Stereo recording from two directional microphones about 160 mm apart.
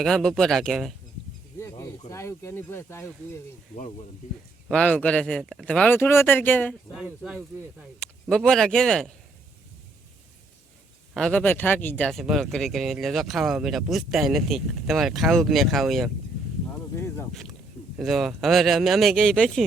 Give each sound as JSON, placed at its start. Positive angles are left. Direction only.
{"t": 0.0, "sound": "speech", "side_deg": 5}
{"t": 1.5, "sound": "speech", "side_deg": 20}
{"t": 4.7, "sound": "speech", "side_deg": 5}
{"t": 6.9, "sound": "speech", "side_deg": -5}
{"t": 7.9, "sound": "speech", "side_deg": 5}
{"t": 11.1, "sound": "speech", "side_deg": 5}
{"t": 17.9, "sound": "speech", "side_deg": 0}